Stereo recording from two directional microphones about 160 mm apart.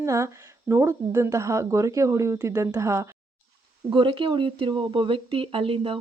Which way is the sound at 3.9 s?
30° right (ahead or behind).